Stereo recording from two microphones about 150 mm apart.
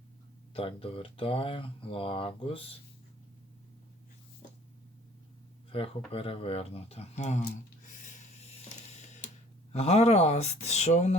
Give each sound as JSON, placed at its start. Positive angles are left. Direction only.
{"t": 0.5, "sound": "speech", "side_deg": 40}
{"t": 5.7, "sound": "speech", "side_deg": 40}
{"t": 8.0, "sound": "a sound", "side_deg": 45}
{"t": 9.7, "sound": "speech", "side_deg": 45}